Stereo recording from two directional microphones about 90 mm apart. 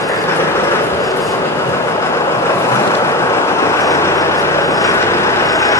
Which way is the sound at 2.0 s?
30° left (ahead or behind).